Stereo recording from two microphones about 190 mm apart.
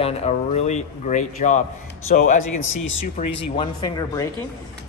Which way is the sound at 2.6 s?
90° left.